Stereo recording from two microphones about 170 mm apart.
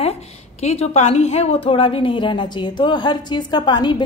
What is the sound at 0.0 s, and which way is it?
A woman's voice, 40° left (ahead or behind).